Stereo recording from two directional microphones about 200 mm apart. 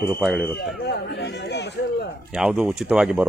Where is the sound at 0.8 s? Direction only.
55° left (ahead or behind).